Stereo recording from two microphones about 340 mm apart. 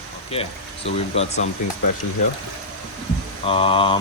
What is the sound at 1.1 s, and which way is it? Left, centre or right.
Speech, centre.